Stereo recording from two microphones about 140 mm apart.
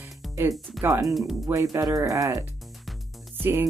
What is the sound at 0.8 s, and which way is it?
Speech, 15° right (ahead or behind).